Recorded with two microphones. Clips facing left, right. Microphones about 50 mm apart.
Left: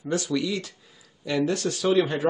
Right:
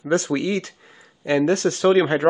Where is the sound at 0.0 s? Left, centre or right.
Right.